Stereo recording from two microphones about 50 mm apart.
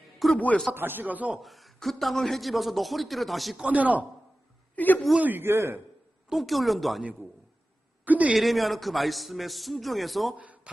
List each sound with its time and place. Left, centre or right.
0.2 s a man's voice: centre
0.7 s speech: right
1.4 s a man's voice: centre
3.7 s speech: right
4.7 s a woman's voice: left
5.2 s a man's voice: right
6.3 s a man's voice: centre
8.0 s a sound: right
8.3 s a man's voice: centre
10.3 s a sound: right